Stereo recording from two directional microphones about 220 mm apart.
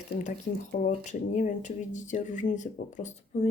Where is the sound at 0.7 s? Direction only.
35° left (ahead or behind).